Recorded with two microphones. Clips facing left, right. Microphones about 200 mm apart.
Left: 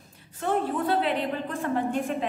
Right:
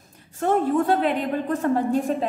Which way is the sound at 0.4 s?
45° right (ahead or behind).